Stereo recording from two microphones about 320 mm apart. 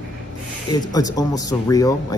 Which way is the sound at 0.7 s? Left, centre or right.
Centre.